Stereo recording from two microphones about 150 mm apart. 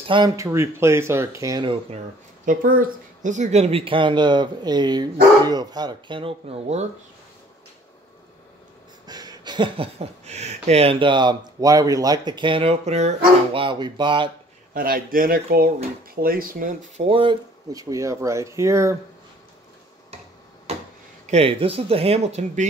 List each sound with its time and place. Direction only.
0.0 s speech: 35° right (ahead or behind)
0.4 s speech: 20° right (ahead or behind)
2.4 s speech: 65° right (ahead or behind); by 6.9 s 45° right (ahead or behind)
9.0 s speech: 25° right (ahead or behind)
14.7 s speech: 70° right (ahead or behind)
16.9 s speech: 40° right (ahead or behind)
17.7 s speech: 20° right (ahead or behind)
20.7 s tick-tock: 45° right (ahead or behind)
21.3 s speech: 40° right (ahead or behind)